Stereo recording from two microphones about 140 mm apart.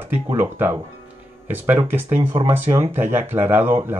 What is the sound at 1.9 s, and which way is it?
Speech, 15° right (ahead or behind).